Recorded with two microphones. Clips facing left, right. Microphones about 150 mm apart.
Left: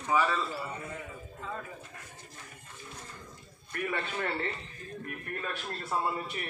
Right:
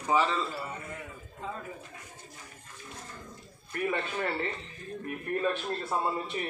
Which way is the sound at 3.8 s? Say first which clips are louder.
Right 3 dB; 20° right (ahead or behind).